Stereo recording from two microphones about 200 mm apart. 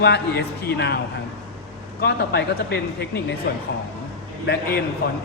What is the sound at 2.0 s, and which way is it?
Speech, 55° left (ahead or behind).